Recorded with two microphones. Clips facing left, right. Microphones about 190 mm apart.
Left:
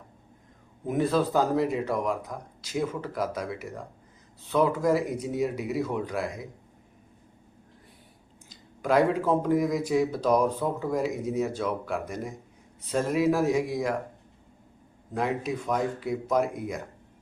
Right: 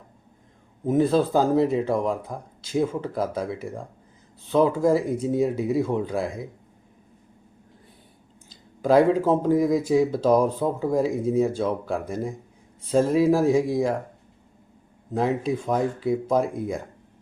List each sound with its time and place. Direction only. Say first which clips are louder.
0.9 s speech: right 5 dB; 30° right (ahead or behind)
8.8 s speech: right 5 dB; 30° right (ahead or behind)
15.1 s speech: right 5 dB; 30° right (ahead or behind)